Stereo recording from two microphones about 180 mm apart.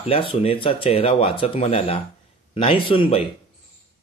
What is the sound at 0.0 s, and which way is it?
A man's voice, 30° left (ahead or behind).